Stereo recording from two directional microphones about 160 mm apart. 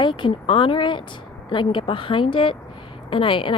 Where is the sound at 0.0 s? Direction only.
30° left (ahead or behind).